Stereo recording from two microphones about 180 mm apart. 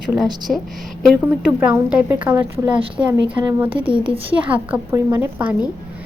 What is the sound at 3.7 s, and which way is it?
Speech, 30° right (ahead or behind).